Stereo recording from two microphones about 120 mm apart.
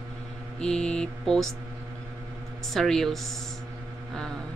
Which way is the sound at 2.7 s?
5° left (ahead or behind).